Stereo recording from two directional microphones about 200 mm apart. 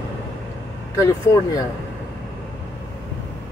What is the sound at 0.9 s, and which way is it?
Speech, 15° left (ahead or behind).